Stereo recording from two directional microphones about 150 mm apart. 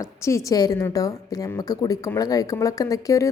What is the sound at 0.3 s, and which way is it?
Speech, 25° left (ahead or behind).